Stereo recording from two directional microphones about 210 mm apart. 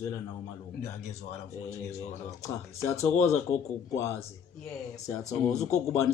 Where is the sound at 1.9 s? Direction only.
15° left (ahead or behind).